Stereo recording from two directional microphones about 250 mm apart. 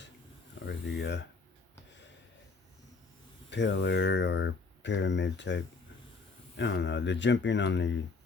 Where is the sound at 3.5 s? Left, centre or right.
Left.